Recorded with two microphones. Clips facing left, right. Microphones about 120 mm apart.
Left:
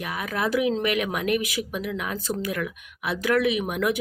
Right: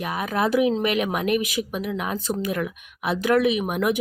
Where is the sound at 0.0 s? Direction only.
25° right (ahead or behind).